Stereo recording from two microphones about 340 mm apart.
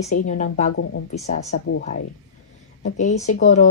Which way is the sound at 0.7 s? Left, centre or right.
Left.